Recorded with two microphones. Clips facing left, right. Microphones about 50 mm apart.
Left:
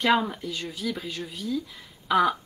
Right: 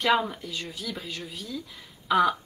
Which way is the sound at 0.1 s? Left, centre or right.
Centre.